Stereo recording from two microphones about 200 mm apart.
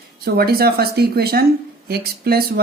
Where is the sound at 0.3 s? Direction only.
50° right (ahead or behind).